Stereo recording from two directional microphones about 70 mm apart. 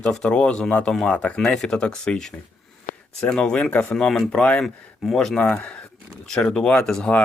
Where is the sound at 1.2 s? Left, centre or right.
Centre.